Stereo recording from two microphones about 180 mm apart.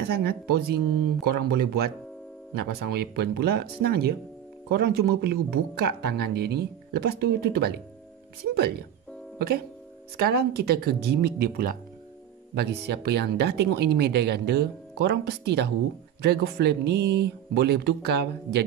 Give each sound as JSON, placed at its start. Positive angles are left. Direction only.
{"t": 0.2, "sound": "speech", "side_deg": -60}
{"t": 10.1, "sound": "speech", "side_deg": -60}